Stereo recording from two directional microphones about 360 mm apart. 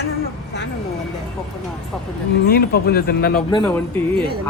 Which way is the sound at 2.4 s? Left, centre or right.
Left.